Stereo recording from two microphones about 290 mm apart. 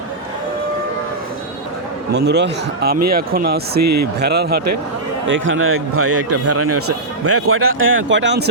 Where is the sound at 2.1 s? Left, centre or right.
Right.